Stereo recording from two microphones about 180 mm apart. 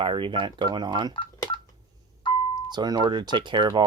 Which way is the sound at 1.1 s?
25° left (ahead or behind).